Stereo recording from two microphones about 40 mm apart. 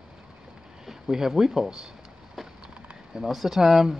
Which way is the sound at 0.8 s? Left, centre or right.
Centre.